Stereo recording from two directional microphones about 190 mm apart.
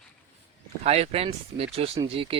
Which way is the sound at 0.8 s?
35° right (ahead or behind).